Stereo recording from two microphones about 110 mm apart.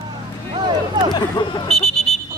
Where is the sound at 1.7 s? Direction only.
5° left (ahead or behind).